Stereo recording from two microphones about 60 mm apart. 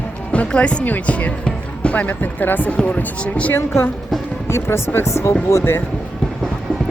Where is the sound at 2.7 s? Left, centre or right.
Left.